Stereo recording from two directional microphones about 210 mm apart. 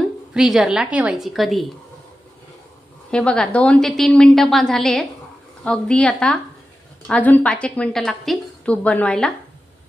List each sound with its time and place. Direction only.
0.3 s a woman's voice: 5° right (ahead or behind)
3.1 s a woman's voice: 5° left (ahead or behind)